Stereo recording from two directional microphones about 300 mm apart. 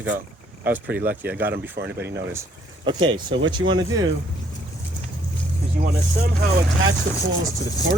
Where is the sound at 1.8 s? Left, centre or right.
Right.